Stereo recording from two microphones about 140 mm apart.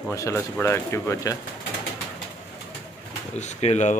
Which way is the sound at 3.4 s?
55° left (ahead or behind).